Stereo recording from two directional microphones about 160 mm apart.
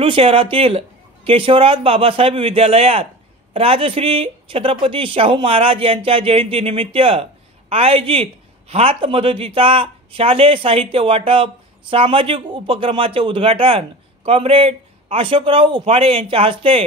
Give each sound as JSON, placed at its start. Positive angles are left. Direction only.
{"t": 0.0, "sound": "speech", "side_deg": -35}